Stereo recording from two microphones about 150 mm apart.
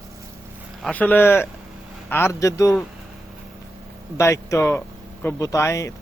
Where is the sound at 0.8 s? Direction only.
5° left (ahead or behind); by 2.7 s 20° left (ahead or behind).